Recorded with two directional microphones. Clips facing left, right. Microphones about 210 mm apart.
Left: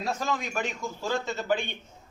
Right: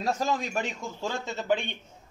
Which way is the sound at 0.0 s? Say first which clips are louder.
Right 2 dB; 35° right (ahead or behind).